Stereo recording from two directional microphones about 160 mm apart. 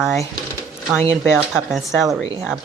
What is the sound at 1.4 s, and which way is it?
Speech, centre (ahead or behind).